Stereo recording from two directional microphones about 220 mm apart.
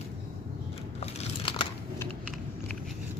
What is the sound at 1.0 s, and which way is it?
Crumpling, 25° left (ahead or behind).